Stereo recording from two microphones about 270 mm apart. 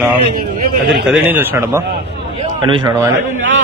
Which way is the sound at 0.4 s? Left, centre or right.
Right.